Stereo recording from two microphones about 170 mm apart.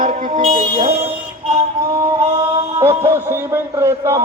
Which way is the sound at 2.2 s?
20° right (ahead or behind).